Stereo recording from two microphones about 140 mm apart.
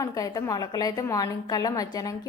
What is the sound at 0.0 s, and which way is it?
A woman's voice, 25° left (ahead or behind).